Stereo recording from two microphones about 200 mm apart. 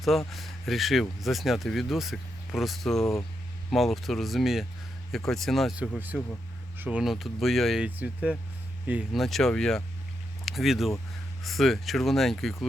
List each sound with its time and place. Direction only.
0.3 s speech: centre (ahead or behind)
3.0 s speech: 15° left (ahead or behind)
3.7 s speech: centre (ahead or behind)